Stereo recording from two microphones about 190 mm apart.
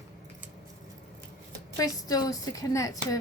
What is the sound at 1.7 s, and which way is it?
A woman's voice, 20° left (ahead or behind).